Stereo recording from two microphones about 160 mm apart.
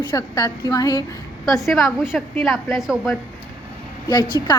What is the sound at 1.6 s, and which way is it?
Speech, centre (ahead or behind).